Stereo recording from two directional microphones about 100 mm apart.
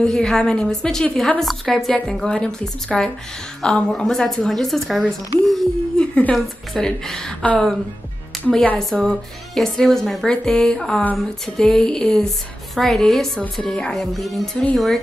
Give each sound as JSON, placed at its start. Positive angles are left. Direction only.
{"t": 0.0, "sound": "a woman's voice", "side_deg": 5}
{"t": 8.7, "sound": "a woman's voice", "side_deg": 5}